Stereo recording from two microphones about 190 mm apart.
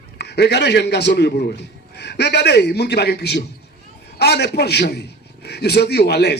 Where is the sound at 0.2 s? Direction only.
60° left (ahead or behind).